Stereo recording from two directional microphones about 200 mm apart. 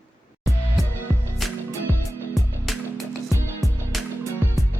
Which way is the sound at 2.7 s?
Centre (ahead or behind).